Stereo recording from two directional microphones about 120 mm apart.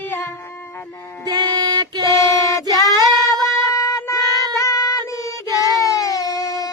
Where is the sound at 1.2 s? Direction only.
35° right (ahead or behind).